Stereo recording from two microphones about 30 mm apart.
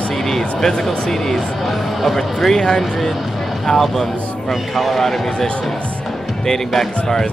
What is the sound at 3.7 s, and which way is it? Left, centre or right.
Speech, left.